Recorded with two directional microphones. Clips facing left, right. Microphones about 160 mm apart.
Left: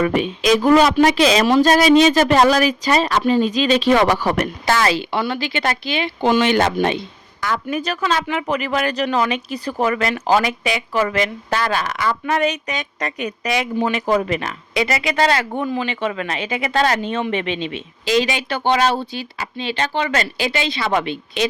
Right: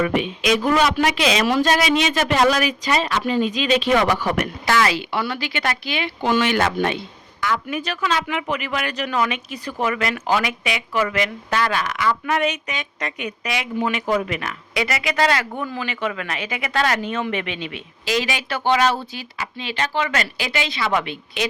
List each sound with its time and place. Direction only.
0.0 s speech: 35° left (ahead or behind)
7.4 s speech: 40° left (ahead or behind)